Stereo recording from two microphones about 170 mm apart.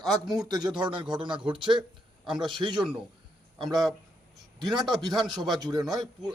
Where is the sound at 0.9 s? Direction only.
30° right (ahead or behind).